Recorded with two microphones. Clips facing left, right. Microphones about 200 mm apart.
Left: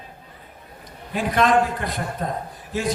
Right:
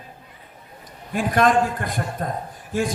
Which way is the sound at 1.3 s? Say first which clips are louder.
Even; 50° right (ahead or behind).